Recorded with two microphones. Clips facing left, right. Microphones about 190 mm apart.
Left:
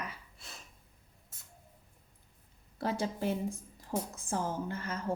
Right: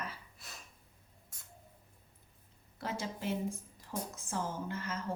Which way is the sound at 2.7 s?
35° left (ahead or behind).